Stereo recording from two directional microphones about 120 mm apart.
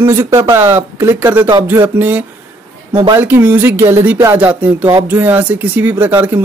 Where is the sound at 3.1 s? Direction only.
15° right (ahead or behind).